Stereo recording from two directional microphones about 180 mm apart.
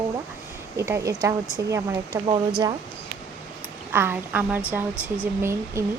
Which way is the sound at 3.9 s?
10° right (ahead or behind).